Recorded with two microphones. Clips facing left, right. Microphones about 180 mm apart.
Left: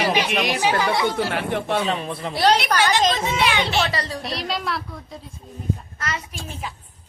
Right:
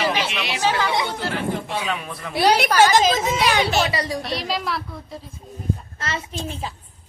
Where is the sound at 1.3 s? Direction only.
70° left (ahead or behind).